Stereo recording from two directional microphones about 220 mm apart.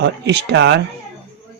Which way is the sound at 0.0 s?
50° right (ahead or behind).